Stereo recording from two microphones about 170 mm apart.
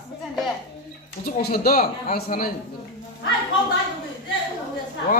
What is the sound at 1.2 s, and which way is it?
Speech, 60° left (ahead or behind).